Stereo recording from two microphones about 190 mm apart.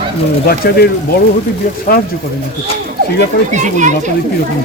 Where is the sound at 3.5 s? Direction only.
40° right (ahead or behind).